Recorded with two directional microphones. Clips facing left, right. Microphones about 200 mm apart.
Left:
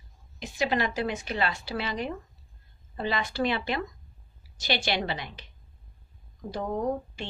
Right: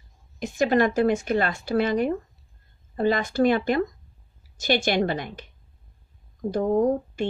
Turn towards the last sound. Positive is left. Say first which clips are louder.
# right 8 dB
turn(degrees=-50)  # may be behind; listen again after turning